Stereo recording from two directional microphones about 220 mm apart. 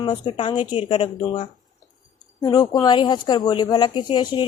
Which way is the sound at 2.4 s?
20° left (ahead or behind).